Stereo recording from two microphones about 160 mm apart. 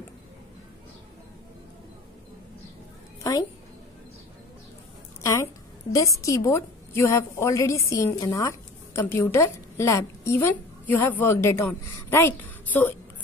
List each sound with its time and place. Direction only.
5.2 s a woman's voice: 20° left (ahead or behind)